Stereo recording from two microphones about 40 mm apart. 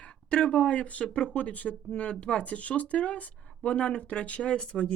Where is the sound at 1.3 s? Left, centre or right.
Left.